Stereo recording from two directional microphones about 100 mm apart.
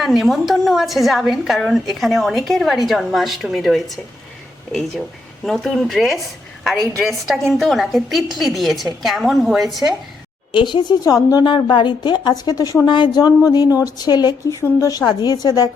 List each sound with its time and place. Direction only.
0.0 s a woman's voice: centre (ahead or behind)
5.5 s a woman's voice: centre (ahead or behind)
10.5 s a woman's voice: 50° left (ahead or behind)